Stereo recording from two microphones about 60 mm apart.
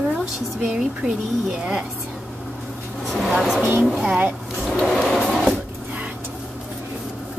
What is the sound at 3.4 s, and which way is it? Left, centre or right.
Speech, centre.